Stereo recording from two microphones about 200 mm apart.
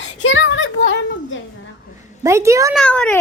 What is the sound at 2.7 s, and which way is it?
Speech, 5° left (ahead or behind).